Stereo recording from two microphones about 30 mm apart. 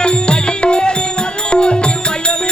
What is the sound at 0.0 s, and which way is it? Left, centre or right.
Music, left.